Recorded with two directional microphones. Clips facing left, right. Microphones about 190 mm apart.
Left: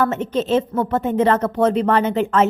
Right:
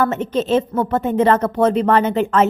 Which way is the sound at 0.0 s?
40° right (ahead or behind).